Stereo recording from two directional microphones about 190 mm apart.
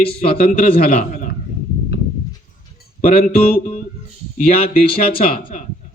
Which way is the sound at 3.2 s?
50° left (ahead or behind).